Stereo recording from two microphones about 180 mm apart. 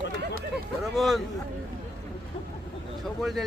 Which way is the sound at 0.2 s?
65° right (ahead or behind).